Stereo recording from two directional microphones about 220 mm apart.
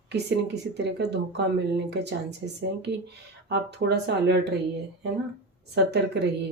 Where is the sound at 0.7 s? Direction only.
50° right (ahead or behind).